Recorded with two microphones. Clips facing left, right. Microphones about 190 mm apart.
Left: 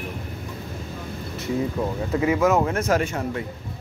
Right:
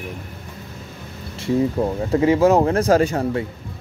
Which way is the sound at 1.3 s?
30° right (ahead or behind).